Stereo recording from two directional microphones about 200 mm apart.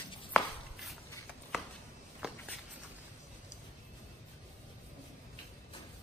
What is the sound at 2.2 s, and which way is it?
Walk, 5° right (ahead or behind).